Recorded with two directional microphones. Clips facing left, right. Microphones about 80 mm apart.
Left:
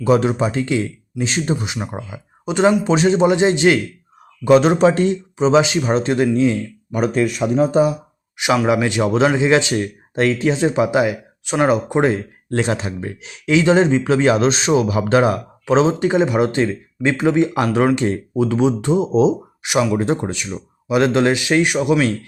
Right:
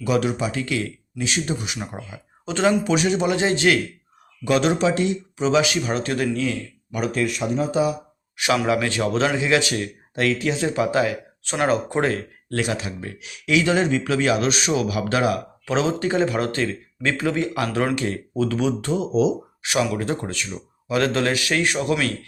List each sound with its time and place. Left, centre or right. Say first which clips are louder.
0.0 s speech: left 6 dB; left
2.8 s speech: left 6 dB; left
5.4 s speech: left 5 dB; left
8.6 s speech: left 5 dB; left